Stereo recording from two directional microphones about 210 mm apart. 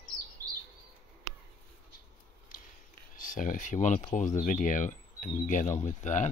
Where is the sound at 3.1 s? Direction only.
40° left (ahead or behind).